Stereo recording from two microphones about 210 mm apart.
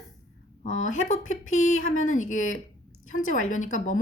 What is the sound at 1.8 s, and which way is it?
Speech, 70° left (ahead or behind).